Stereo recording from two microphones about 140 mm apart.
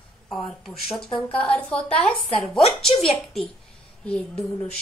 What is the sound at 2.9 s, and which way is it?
Speech, 45° left (ahead or behind).